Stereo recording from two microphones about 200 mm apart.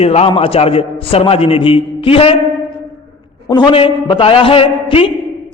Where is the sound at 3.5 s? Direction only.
20° left (ahead or behind).